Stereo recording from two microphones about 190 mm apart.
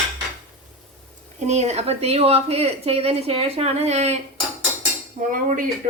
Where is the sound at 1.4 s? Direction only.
35° right (ahead or behind).